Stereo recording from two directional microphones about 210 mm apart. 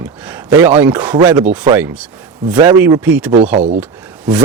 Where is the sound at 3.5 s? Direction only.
30° right (ahead or behind).